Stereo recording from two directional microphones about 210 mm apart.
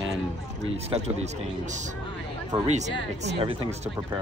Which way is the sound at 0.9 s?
30° right (ahead or behind).